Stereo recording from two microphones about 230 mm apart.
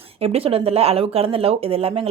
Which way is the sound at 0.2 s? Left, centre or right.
Right.